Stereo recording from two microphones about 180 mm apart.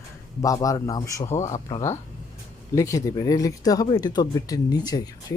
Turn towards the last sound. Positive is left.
turn(degrees=20)  # may be behind; listen again after turning